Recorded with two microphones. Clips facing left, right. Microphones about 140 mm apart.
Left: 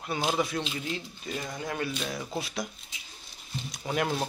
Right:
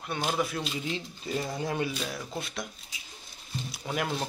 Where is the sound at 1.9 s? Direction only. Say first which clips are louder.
Left 1 dB; 5° right (ahead or behind).